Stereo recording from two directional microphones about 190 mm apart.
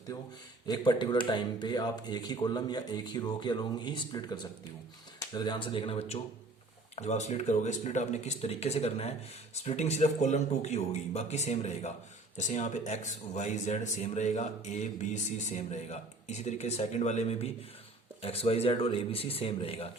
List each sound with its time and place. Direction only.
0.7 s speech: 25° left (ahead or behind)